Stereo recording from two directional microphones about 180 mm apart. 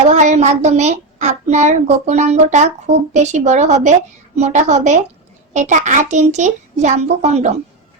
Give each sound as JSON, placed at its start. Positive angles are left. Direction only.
{"t": 0.1, "sound": "a child's voice", "side_deg": -40}